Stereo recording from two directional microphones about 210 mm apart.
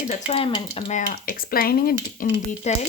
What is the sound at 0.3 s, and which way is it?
Speech, 25° left (ahead or behind).